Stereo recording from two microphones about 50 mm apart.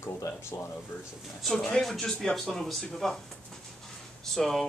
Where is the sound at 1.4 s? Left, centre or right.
Centre.